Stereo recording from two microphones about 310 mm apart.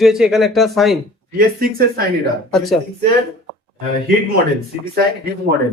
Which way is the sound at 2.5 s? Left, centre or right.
Centre.